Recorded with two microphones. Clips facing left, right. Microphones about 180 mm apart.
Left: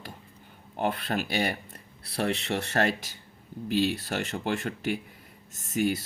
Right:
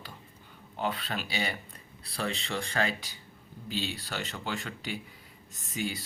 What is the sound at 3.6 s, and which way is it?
Speech, 45° left (ahead or behind).